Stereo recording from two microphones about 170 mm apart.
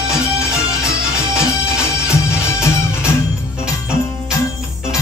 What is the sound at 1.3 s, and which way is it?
Music, 5° right (ahead or behind).